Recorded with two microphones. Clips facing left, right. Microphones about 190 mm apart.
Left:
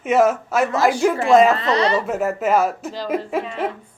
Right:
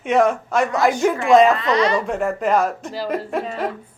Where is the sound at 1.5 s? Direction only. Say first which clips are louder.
Even; 30° left (ahead or behind).